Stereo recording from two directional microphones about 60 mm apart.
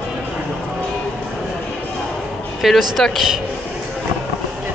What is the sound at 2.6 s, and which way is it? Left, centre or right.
Speech, centre.